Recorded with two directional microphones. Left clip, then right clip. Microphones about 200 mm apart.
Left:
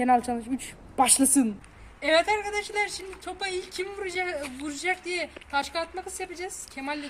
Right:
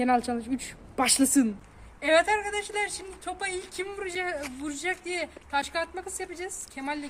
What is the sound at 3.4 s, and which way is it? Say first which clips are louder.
A woman's voice: left 3 dB; 20° right (ahead or behind).